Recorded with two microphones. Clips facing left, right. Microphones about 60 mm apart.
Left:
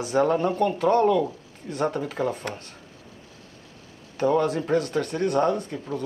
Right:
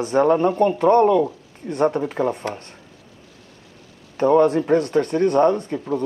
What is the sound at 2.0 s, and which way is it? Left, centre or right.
Speech, right.